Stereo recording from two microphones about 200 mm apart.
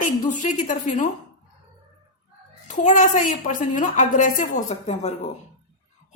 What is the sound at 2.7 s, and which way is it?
A woman's voice, 35° left (ahead or behind).